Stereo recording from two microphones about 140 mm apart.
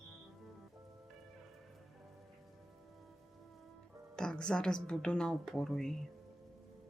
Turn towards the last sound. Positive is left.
turn(degrees=5)  # may be behind; listen again after turning